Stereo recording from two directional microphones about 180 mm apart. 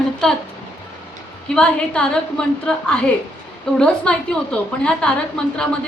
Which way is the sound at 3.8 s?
5° left (ahead or behind).